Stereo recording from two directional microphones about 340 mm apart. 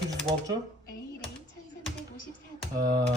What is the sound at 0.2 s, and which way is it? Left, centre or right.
Speech, centre.